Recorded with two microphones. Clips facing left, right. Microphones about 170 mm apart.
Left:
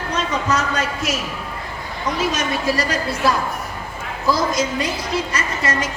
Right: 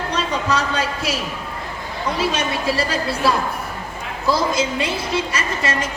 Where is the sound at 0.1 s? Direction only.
30° right (ahead or behind).